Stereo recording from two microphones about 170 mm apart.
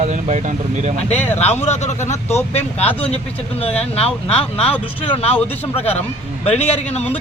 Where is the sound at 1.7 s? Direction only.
40° left (ahead or behind).